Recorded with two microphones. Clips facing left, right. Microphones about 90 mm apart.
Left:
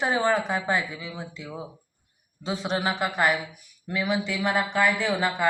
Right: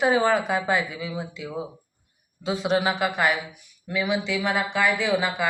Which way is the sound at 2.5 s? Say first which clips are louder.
Right 4 dB; centre (ahead or behind).